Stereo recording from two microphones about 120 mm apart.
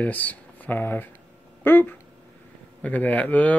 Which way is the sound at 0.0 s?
15° left (ahead or behind).